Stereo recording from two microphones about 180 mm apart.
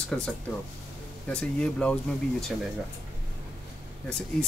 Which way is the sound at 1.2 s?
5° left (ahead or behind).